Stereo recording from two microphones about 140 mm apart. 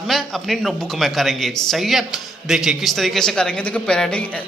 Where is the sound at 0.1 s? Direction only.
Centre (ahead or behind).